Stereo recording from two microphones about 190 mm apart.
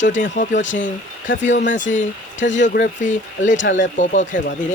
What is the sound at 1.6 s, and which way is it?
Speech, 40° left (ahead or behind).